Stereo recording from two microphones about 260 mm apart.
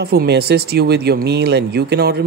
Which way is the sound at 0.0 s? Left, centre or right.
Right.